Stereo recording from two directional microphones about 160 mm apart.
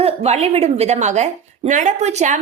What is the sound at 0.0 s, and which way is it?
A woman's voice, 40° right (ahead or behind).